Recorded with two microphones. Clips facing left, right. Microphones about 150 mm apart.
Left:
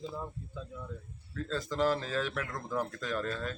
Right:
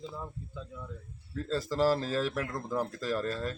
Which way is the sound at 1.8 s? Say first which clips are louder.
Right 3 dB; 35° right (ahead or behind).